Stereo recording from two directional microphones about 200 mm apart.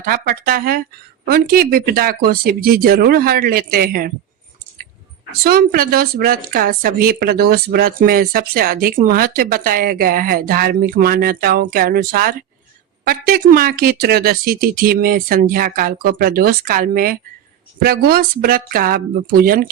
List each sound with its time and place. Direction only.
0.0 s speech: 45° right (ahead or behind)
5.4 s speech: 50° right (ahead or behind)